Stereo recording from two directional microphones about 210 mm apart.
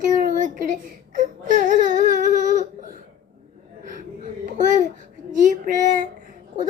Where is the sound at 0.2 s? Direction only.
35° right (ahead or behind).